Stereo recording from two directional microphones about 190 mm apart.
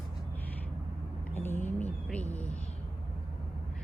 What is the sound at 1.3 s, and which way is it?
Speech, 10° left (ahead or behind).